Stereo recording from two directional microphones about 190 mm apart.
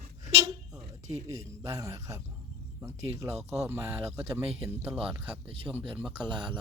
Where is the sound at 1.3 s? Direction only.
20° right (ahead or behind).